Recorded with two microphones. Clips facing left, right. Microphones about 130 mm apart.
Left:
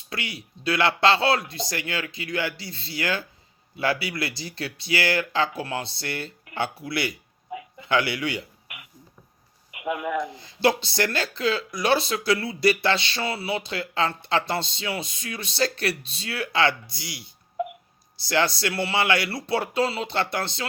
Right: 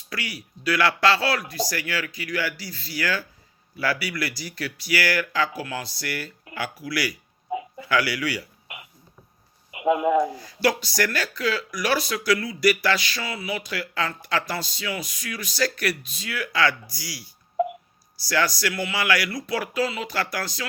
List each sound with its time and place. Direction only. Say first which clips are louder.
0.1 s speech: even; 25° left (ahead or behind)
8.6 s a sound: right 4 dB; 25° right (ahead or behind)
9.7 s speech: right 7 dB; 25° right (ahead or behind)
10.3 s speech: left 1 dB; 25° left (ahead or behind)